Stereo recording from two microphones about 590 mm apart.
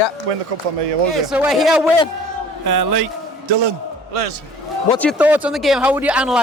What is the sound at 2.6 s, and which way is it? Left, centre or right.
Speech, right.